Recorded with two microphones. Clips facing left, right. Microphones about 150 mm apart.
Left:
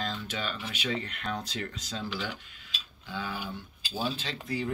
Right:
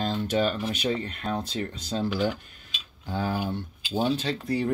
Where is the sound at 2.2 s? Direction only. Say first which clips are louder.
Right 10 dB; 45° right (ahead or behind).